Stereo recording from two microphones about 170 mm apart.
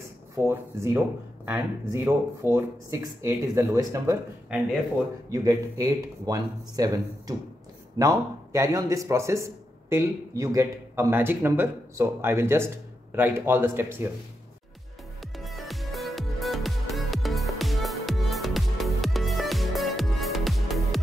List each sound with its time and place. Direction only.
0.4 s speech: 10° right (ahead or behind)
5.3 s speech: 20° right (ahead or behind)
15.3 s music: centre (ahead or behind)